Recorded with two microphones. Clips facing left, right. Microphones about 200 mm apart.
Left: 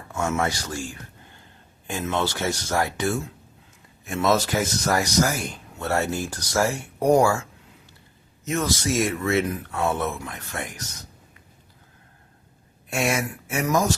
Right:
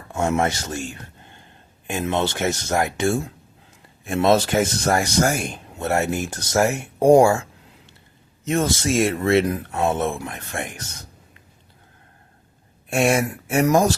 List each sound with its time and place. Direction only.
0.3 s speech: 25° right (ahead or behind)
4.2 s speech: 25° right (ahead or behind)
8.4 s speech: 30° right (ahead or behind)
12.9 s speech: 30° right (ahead or behind)